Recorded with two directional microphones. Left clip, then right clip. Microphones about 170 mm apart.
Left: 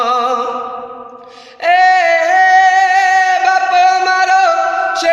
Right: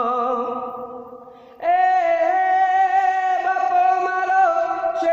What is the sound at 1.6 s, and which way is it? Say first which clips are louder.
Female singing: left 8 dB; 10° left (ahead or behind).